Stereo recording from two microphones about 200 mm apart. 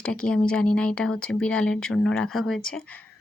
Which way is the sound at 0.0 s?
5° left (ahead or behind).